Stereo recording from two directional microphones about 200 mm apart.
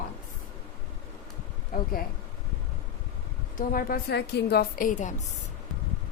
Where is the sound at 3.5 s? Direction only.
45° left (ahead or behind).